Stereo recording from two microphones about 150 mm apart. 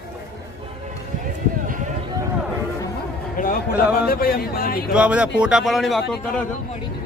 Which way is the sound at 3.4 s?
60° left (ahead or behind).